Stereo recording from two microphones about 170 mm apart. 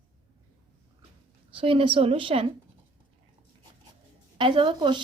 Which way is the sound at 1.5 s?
30° right (ahead or behind).